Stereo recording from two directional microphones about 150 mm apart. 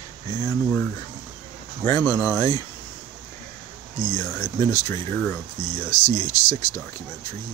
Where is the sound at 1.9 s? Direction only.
20° left (ahead or behind).